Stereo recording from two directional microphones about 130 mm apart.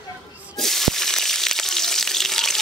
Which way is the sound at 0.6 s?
Centre (ahead or behind).